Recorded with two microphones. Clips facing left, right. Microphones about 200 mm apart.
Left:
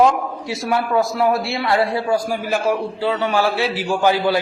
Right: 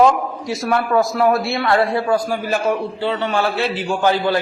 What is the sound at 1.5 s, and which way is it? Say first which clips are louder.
A man's voice: right 2 dB; 10° left (ahead or behind).